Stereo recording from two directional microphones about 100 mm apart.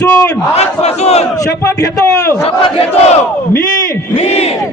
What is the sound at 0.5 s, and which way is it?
Battle cry, 90° left.